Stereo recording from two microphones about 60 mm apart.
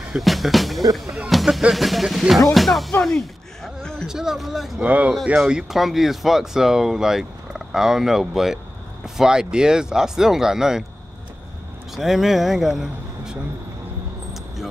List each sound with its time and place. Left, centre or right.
0.1 s speech: centre
1.3 s music: centre
1.7 s speech: centre
3.0 s a sound: centre
4.1 s speech: centre
4.8 s speech: right
5.5 s speech: centre
11.9 s speech: centre